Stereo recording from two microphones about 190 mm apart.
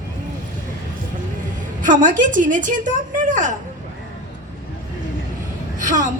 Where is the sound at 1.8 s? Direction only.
45° right (ahead or behind).